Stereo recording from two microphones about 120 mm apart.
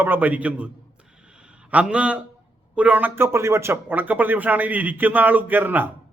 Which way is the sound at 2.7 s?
10° right (ahead or behind).